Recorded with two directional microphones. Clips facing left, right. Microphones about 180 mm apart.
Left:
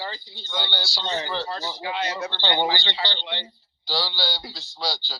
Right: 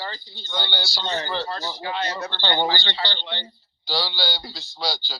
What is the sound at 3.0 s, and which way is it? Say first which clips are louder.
Speech: even; 25° left (ahead or behind).